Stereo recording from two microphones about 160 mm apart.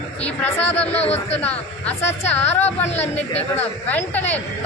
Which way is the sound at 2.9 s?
45° left (ahead or behind).